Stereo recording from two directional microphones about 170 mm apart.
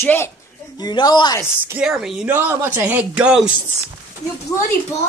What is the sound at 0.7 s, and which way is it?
Speech, 25° left (ahead or behind).